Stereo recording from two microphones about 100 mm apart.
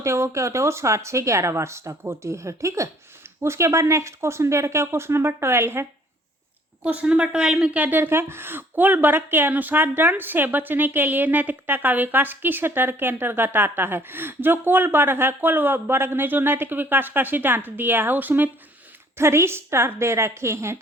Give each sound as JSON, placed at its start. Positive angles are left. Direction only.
{"t": 0.0, "sound": "speech", "side_deg": -30}
{"t": 6.8, "sound": "speech", "side_deg": -10}